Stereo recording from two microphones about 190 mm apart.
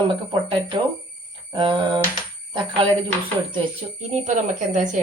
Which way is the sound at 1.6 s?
25° right (ahead or behind).